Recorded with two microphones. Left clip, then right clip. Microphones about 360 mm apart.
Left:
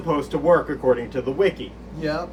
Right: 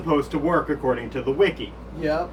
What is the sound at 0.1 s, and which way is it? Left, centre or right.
Speech, centre.